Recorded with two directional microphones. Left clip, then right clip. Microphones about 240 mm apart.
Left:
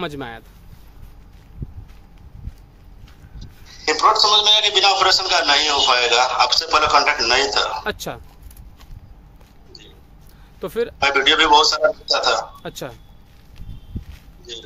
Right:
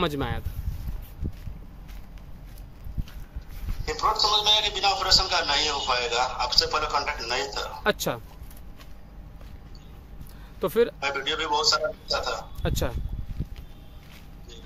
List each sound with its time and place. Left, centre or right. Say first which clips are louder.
0.0 s speech: right 1 dB; centre
3.3 s a man's voice: left 8 dB; left
7.8 s speech: right 1 dB; centre
10.6 s speech: right 1 dB; centre
11.0 s a man's voice: left 13 dB; left
12.6 s speech: right 1 dB; centre
14.5 s a man's voice: left 15 dB; left